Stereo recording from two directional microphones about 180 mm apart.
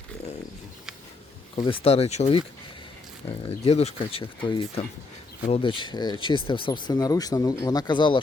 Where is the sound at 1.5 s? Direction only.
30° left (ahead or behind).